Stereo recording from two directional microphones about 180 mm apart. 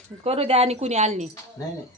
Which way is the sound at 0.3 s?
35° right (ahead or behind).